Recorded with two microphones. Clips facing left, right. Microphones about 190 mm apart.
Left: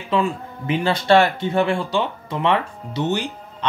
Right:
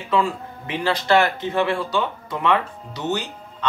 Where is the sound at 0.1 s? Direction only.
25° left (ahead or behind).